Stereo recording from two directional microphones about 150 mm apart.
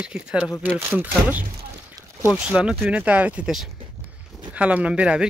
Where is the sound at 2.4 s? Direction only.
5° right (ahead or behind).